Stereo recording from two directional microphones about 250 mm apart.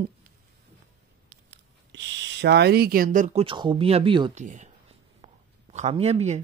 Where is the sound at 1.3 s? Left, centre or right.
Right.